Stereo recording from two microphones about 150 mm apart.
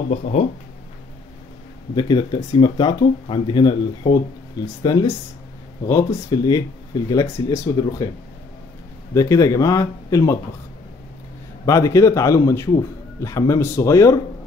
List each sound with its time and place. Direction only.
0.1 s speech: 55° left (ahead or behind)
2.0 s a man's voice: 30° left (ahead or behind)
9.1 s a man's voice: 20° left (ahead or behind)
11.6 s a man's voice: 20° left (ahead or behind)